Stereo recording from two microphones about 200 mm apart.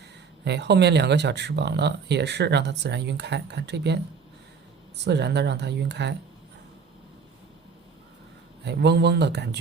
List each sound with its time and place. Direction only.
0.4 s speech: 55° right (ahead or behind)
8.6 s speech: 55° right (ahead or behind)